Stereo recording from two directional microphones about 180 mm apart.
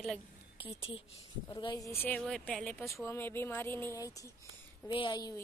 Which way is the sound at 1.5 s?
25° left (ahead or behind).